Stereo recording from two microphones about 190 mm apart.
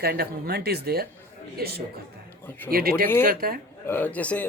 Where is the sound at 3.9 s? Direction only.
10° left (ahead or behind).